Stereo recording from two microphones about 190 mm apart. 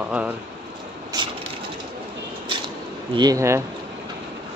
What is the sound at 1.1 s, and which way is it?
Crushing, 25° right (ahead or behind).